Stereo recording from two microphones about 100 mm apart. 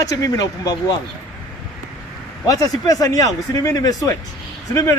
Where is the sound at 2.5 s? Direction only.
35° left (ahead or behind).